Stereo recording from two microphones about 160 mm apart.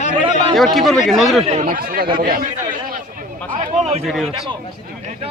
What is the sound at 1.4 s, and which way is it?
Speech, 40° right (ahead or behind).